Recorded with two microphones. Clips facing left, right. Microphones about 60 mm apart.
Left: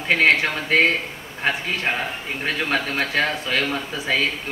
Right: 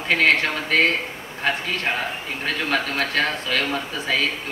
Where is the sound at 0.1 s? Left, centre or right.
Centre.